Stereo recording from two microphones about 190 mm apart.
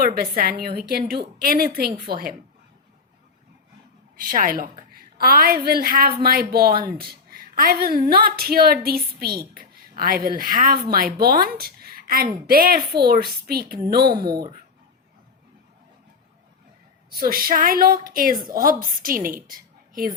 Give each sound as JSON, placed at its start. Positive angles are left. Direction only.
{"t": 0.0, "sound": "a woman's voice", "side_deg": -50}
{"t": 4.2, "sound": "a woman's voice", "side_deg": -45}
{"t": 17.1, "sound": "a woman's voice", "side_deg": -50}